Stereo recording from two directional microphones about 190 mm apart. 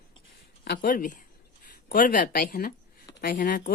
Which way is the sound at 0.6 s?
60° left (ahead or behind).